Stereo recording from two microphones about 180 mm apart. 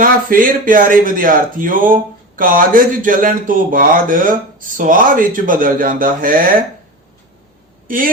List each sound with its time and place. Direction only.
0.0 s speech: 50° right (ahead or behind)
7.9 s a woman's voice: 50° right (ahead or behind)